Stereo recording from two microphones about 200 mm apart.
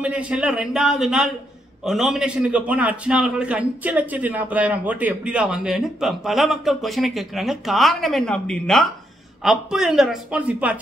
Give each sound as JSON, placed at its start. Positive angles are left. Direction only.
{"t": 0.0, "sound": "a man's voice", "side_deg": -5}